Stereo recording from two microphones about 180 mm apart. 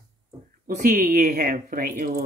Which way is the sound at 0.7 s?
50° right (ahead or behind).